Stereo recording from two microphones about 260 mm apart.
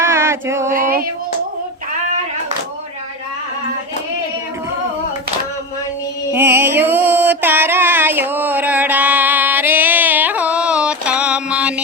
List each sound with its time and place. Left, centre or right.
0.0 s a sound: centre
0.7 s female singing: right
6.3 s music: centre